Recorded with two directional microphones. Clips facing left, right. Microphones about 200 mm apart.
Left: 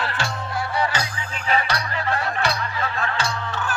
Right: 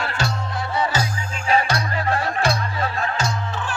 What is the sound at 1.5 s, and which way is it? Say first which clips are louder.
Music: right 3 dB; 45° right (ahead or behind).